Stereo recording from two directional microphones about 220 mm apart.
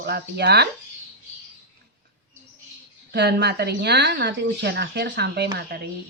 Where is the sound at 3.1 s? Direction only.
50° right (ahead or behind).